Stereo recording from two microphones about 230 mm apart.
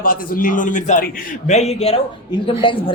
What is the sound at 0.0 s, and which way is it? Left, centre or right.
A man's voice, left.